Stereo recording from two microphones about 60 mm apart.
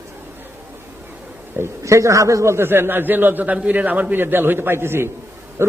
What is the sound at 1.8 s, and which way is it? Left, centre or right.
A man's voice, right.